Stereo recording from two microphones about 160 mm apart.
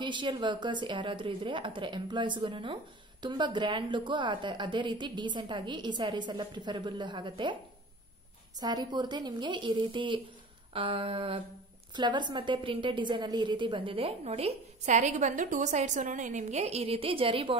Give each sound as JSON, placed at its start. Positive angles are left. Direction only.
{"t": 0.0, "sound": "a woman's voice", "side_deg": -30}
{"t": 8.5, "sound": "a woman's voice", "side_deg": -25}